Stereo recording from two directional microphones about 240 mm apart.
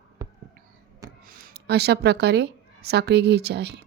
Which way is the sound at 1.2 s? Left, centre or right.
Right.